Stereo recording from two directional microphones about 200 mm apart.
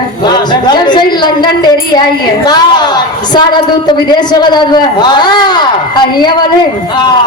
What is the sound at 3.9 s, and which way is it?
A man's voice, 20° left (ahead or behind).